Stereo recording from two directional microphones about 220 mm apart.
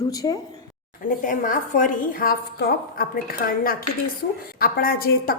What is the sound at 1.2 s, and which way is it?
A woman's voice, 35° left (ahead or behind).